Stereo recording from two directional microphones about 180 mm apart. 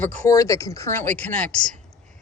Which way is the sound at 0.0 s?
15° left (ahead or behind).